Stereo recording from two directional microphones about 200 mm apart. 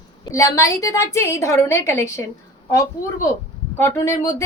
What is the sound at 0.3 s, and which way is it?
A woman's voice, 15° left (ahead or behind).